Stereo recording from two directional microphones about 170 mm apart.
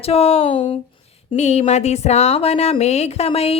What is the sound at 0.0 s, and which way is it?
A woman's voice, 35° left (ahead or behind).